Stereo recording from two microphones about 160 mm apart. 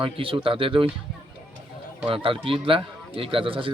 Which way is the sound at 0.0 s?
35° right (ahead or behind).